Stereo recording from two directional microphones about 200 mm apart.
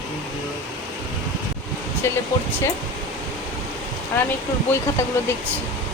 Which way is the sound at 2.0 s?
15° left (ahead or behind).